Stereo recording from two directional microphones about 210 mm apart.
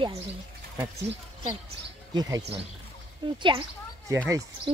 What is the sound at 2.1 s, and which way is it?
Speech, 20° right (ahead or behind).